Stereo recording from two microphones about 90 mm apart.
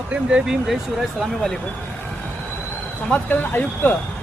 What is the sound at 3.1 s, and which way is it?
Speech, 20° left (ahead or behind).